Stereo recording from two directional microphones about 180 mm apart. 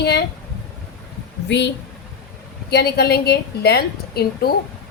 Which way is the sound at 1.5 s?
75° left (ahead or behind).